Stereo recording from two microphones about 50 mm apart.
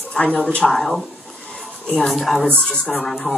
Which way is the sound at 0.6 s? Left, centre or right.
Centre.